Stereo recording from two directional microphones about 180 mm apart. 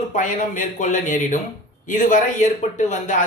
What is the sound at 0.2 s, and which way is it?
Speech, 45° left (ahead or behind).